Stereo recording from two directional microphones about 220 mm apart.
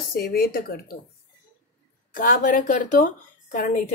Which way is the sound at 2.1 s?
40° left (ahead or behind).